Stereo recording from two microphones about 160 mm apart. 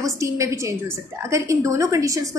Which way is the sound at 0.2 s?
20° right (ahead or behind).